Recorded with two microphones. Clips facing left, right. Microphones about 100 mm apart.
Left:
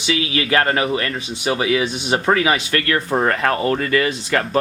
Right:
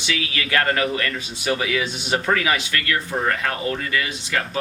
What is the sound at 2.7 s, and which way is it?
Speech, 40° left (ahead or behind).